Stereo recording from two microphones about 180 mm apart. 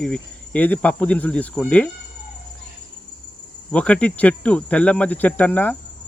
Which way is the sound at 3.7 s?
5° left (ahead or behind).